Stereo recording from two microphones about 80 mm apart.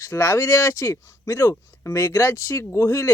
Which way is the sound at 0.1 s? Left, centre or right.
Left.